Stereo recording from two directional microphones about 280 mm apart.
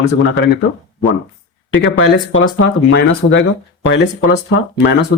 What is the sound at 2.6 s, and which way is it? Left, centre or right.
A man's voice, left.